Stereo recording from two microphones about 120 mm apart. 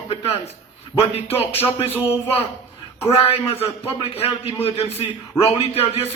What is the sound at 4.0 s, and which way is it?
A man's voice, 55° left (ahead or behind).